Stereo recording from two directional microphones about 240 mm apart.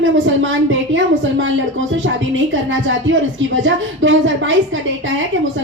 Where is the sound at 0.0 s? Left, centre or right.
Right.